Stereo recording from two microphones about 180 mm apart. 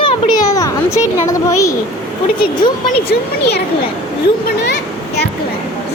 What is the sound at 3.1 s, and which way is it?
Speech, 65° left (ahead or behind).